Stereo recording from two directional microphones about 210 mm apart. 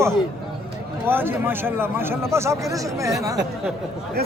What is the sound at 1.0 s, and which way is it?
A man's voice, 10° right (ahead or behind).